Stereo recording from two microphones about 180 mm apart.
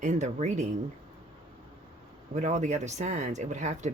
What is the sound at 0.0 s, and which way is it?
Speech, 40° right (ahead or behind).